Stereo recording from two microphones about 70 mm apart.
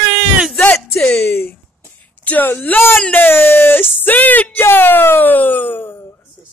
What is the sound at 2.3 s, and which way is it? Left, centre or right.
Speech, left.